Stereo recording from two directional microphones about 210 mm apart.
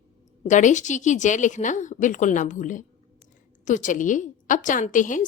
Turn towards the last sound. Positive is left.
turn(degrees=40)  # may be behind; listen again after turning